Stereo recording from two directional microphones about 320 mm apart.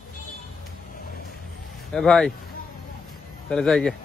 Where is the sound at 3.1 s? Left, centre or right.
Centre.